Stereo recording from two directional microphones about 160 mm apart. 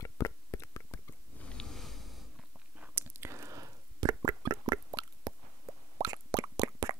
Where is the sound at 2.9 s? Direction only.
15° right (ahead or behind).